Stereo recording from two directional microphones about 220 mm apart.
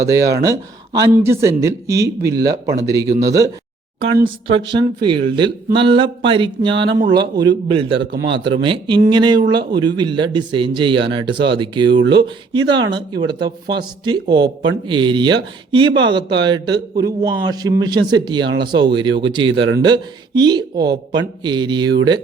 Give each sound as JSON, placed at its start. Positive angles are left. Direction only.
{"t": 0.0, "sound": "speech", "side_deg": -15}
{"t": 4.7, "sound": "speech", "side_deg": -20}